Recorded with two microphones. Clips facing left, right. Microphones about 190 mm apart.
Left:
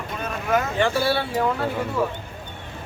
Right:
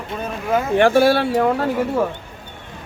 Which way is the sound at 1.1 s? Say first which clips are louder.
Right 6 dB; 45° right (ahead or behind).